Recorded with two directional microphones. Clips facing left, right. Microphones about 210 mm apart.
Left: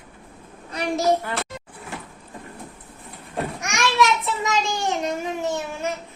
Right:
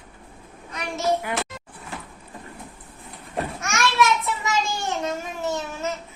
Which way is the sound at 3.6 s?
15° left (ahead or behind).